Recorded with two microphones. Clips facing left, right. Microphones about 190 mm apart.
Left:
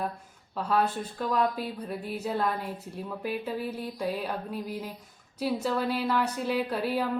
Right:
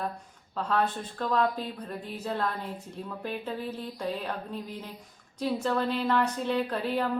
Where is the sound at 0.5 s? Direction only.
10° left (ahead or behind).